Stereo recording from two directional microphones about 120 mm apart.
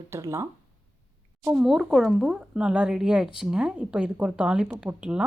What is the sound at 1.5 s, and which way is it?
Speech, 5° right (ahead or behind).